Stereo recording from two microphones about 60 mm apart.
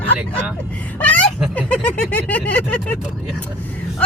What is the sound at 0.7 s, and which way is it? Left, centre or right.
Speech, left.